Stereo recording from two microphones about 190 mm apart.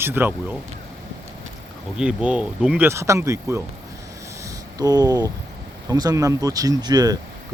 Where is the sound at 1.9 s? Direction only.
5° right (ahead or behind).